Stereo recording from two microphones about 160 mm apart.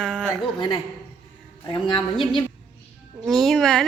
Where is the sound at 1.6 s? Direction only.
25° left (ahead or behind).